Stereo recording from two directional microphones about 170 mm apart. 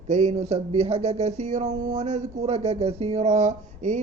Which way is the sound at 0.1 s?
40° right (ahead or behind).